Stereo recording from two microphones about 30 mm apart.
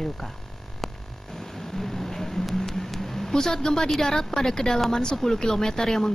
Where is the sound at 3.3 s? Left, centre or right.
Centre.